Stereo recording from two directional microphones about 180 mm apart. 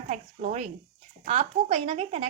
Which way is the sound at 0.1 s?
40° right (ahead or behind).